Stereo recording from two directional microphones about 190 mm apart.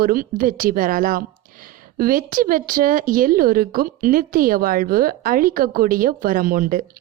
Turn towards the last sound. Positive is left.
turn(degrees=-45)  # may be behind; listen again after turning